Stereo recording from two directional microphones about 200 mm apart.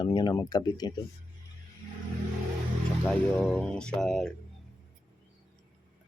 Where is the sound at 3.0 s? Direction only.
Centre (ahead or behind).